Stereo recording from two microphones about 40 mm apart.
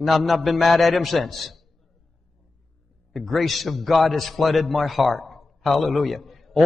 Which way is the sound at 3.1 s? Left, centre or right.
Centre.